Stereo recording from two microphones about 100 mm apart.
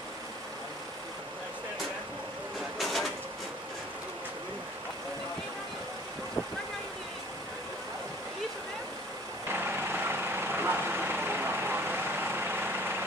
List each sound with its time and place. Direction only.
2.8 s printer: centre (ahead or behind)
9.5 s vehicle: 20° right (ahead or behind)